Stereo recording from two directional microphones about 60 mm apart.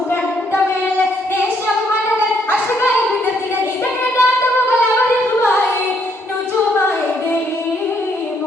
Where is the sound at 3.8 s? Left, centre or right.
Left.